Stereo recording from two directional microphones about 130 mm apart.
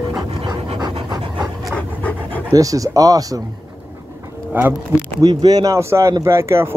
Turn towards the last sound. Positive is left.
turn(degrees=-20)  # may be behind; listen again after turning